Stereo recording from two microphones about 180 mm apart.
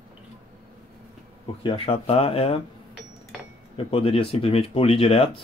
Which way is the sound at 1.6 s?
30° left (ahead or behind).